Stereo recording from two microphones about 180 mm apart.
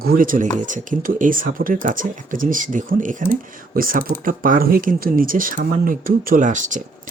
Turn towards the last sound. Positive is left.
turn(degrees=-45)  # may be behind; listen again after turning